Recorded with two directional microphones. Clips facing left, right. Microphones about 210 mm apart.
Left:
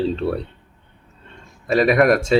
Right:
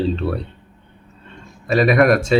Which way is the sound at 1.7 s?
30° left (ahead or behind).